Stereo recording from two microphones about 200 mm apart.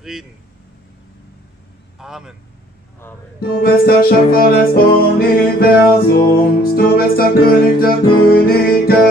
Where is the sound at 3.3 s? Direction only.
50° left (ahead or behind).